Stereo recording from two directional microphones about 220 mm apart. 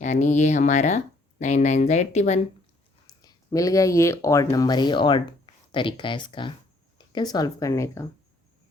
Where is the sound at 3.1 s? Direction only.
15° left (ahead or behind).